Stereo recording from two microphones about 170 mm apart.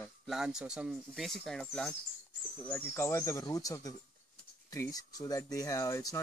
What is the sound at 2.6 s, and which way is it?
Speech, 15° left (ahead or behind).